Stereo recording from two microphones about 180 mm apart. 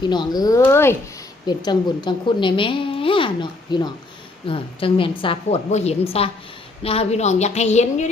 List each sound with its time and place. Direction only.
0.0 s a woman's voice: 25° left (ahead or behind); by 8.1 s 40° left (ahead or behind)